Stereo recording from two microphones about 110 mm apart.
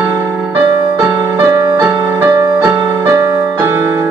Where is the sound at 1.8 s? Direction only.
20° right (ahead or behind).